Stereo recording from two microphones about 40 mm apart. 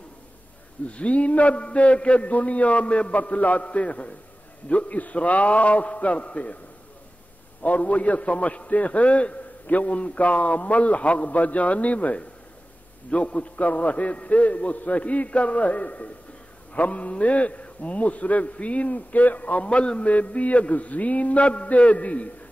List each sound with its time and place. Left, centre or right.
0.8 s a man's voice: left
7.6 s a man's voice: left